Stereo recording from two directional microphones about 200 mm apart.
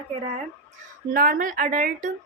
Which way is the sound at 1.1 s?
45° right (ahead or behind).